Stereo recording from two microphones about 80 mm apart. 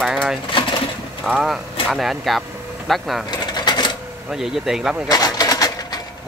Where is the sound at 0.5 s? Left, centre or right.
Left.